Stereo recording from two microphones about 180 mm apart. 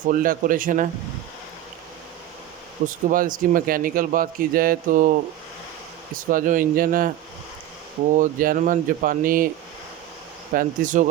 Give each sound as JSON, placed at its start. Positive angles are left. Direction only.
{"t": 0.0, "sound": "a man's voice", "side_deg": -50}
{"t": 2.8, "sound": "a man's voice", "side_deg": -45}
{"t": 6.1, "sound": "a man's voice", "side_deg": -45}
{"t": 8.1, "sound": "a man's voice", "side_deg": -50}
{"t": 10.5, "sound": "a man's voice", "side_deg": -45}